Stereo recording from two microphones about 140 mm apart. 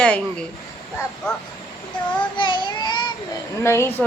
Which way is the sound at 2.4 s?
35° left (ahead or behind).